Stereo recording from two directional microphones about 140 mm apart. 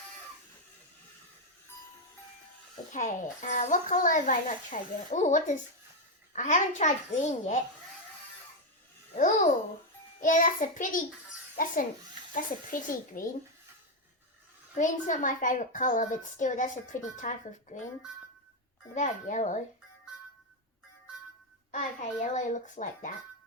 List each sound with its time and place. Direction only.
2.9 s a woman's voice: 60° left (ahead or behind)
9.1 s babbling: 70° left (ahead or behind)
10.2 s speech: 65° left (ahead or behind)
14.8 s a woman's voice: 65° left (ahead or behind)
18.9 s a woman's voice: 60° left (ahead or behind)
21.7 s a woman's voice: 60° left (ahead or behind)